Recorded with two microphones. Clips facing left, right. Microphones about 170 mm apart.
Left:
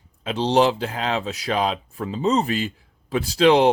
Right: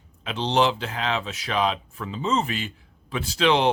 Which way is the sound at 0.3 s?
40° left (ahead or behind).